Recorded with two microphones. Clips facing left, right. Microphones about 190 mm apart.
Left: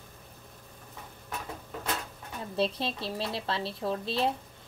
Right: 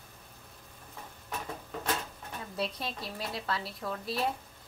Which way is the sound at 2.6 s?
30° left (ahead or behind).